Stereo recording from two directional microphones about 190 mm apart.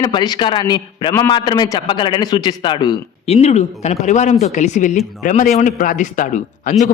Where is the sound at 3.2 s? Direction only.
35° left (ahead or behind).